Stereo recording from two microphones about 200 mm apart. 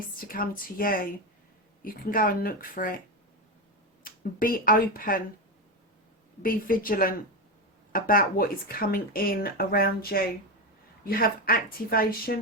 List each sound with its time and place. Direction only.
0.2 s speech: 45° left (ahead or behind)
4.0 s speech: 45° left (ahead or behind)
6.4 s speech: 45° left (ahead or behind)